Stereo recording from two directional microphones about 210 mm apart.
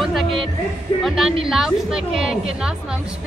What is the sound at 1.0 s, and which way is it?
A woman's voice, centre (ahead or behind).